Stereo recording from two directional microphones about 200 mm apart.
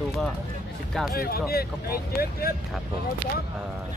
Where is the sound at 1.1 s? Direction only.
50° left (ahead or behind).